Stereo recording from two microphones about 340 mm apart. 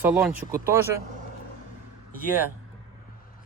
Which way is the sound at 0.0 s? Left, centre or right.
Centre.